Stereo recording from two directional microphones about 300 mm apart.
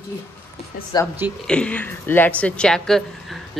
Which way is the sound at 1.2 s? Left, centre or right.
Centre.